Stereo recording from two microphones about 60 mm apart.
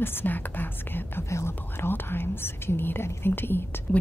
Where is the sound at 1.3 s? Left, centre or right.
Left.